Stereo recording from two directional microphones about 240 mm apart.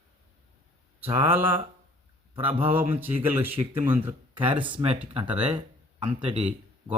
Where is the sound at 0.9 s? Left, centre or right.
Centre.